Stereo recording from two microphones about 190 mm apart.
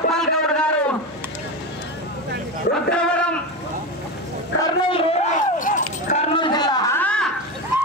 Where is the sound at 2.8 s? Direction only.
5° left (ahead or behind).